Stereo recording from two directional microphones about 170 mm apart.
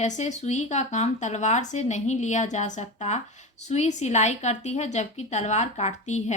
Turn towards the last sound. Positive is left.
turn(degrees=45)  # may be behind; listen again after turning